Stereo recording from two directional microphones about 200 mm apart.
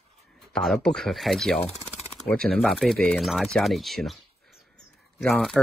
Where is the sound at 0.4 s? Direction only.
Centre (ahead or behind).